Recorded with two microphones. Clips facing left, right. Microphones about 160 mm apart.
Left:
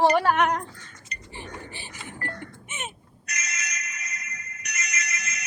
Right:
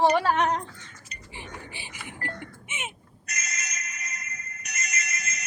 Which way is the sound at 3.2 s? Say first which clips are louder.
Left 1 dB; 50° right (ahead or behind).